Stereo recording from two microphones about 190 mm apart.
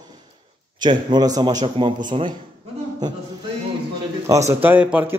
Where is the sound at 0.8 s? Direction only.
25° right (ahead or behind).